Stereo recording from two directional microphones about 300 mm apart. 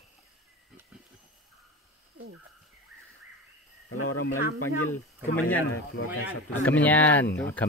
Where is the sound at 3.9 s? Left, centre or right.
Left.